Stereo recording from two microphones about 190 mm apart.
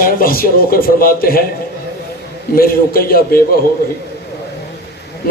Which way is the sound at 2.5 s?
50° left (ahead or behind).